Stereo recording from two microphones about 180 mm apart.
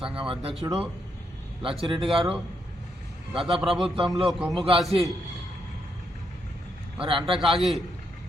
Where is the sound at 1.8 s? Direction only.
30° right (ahead or behind).